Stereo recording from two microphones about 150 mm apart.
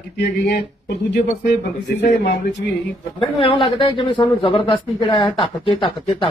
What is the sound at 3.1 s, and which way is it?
Speech, 35° left (ahead or behind).